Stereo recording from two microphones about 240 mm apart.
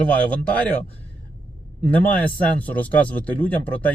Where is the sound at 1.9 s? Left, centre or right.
Centre.